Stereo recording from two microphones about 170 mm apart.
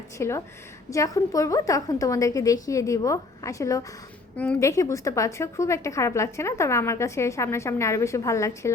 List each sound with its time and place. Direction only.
0.2 s a woman's voice: 15° left (ahead or behind)